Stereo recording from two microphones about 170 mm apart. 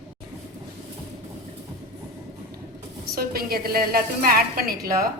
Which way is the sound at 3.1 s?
65° right (ahead or behind).